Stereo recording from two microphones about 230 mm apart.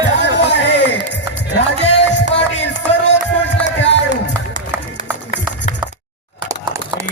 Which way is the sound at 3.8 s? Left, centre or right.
Left.